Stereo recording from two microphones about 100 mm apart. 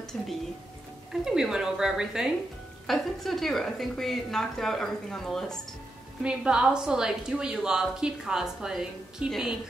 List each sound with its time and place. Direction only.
0.1 s a woman's voice: 5° left (ahead or behind)
6.2 s a woman's voice: 10° right (ahead or behind)